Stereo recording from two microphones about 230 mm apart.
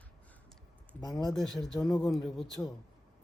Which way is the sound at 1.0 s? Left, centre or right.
Centre.